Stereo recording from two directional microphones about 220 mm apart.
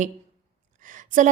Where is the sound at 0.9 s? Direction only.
35° right (ahead or behind).